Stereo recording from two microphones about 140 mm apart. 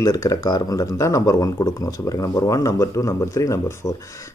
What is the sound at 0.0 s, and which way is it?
Speech, 25° left (ahead or behind).